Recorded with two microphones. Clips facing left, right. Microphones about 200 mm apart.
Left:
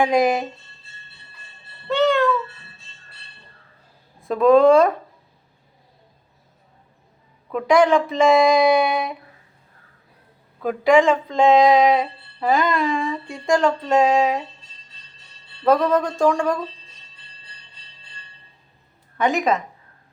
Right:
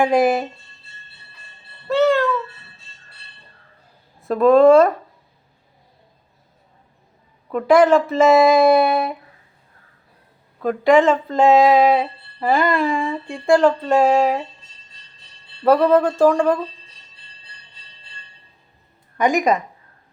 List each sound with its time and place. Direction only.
0.0 s a sound: 5° right (ahead or behind)
1.9 s meow: centre (ahead or behind)
4.3 s speech: centre (ahead or behind)
7.5 s speech: 5° right (ahead or behind)
10.6 s a sound: centre (ahead or behind)
15.6 s speech: 5° right (ahead or behind)
19.1 s a woman's voice: 15° right (ahead or behind)